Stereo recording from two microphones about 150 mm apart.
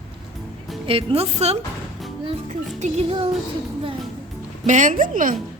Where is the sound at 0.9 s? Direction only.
40° right (ahead or behind).